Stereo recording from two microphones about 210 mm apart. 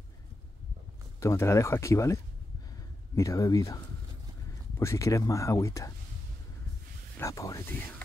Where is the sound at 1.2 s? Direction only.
15° left (ahead or behind).